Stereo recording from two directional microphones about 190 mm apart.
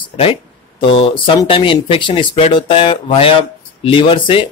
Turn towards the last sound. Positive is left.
turn(degrees=25)  # may be behind; listen again after turning